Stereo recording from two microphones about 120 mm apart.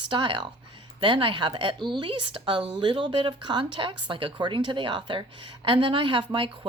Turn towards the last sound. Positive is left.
turn(degrees=-45)  # may be behind; listen again after turning